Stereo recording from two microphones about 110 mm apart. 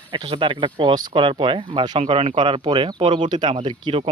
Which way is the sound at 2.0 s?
60° right (ahead or behind).